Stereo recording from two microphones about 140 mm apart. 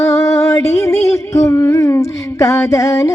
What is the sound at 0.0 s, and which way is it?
Music, 20° left (ahead or behind).